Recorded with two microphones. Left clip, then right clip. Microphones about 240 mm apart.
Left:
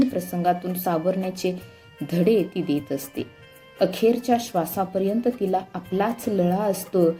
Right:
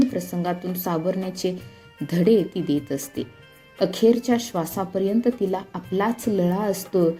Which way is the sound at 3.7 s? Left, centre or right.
Right.